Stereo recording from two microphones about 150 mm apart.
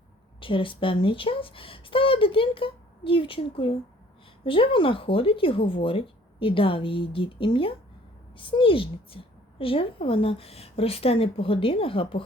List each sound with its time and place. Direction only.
0.3 s a woman's voice: 35° left (ahead or behind)